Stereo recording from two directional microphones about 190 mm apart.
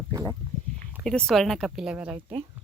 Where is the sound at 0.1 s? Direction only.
15° right (ahead or behind).